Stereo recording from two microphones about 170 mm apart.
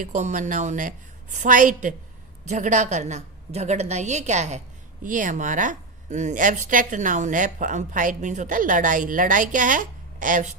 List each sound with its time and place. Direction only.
0.0 s a woman's voice: 45° right (ahead or behind)